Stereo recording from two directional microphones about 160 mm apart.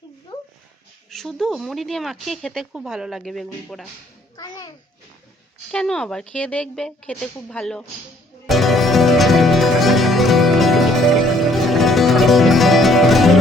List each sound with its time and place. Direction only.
0.3 s dog: 25° left (ahead or behind)
1.1 s speech: centre (ahead or behind)
4.4 s a sound: 25° left (ahead or behind)
5.7 s speech: 5° left (ahead or behind)
8.4 s music: centre (ahead or behind)